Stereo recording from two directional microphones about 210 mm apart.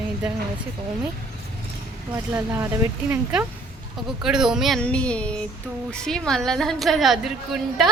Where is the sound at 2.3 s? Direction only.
10° right (ahead or behind).